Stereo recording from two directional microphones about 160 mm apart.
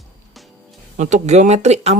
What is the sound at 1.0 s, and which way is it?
Speech, 45° right (ahead or behind).